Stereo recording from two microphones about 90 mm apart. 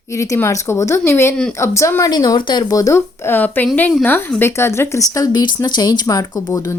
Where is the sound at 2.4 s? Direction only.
55° left (ahead or behind); by 3.0 s 40° left (ahead or behind).